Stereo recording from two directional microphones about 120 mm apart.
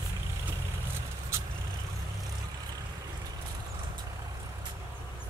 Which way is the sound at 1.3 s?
25° right (ahead or behind).